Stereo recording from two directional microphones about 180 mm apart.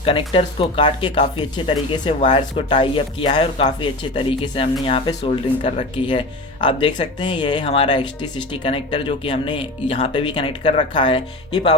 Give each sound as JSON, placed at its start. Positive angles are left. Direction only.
{"t": 0.0, "sound": "speech", "side_deg": 30}